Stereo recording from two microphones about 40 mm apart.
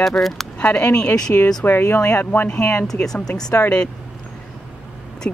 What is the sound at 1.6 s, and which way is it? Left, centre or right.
Speech, left.